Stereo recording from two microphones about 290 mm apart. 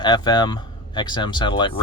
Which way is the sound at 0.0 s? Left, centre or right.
Centre.